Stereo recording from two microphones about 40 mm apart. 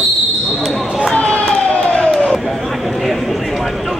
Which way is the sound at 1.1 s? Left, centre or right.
Left.